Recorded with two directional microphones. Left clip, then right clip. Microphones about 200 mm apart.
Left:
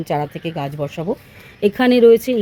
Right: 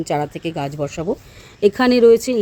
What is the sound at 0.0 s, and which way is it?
Speech, centre (ahead or behind).